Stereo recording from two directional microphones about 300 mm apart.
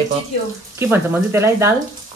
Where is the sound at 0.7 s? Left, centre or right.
Centre.